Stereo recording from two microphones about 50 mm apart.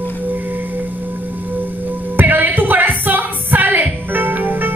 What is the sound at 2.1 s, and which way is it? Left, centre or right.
Music, right.